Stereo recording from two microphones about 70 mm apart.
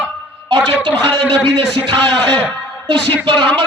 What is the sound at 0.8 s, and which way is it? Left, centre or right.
Speech, left.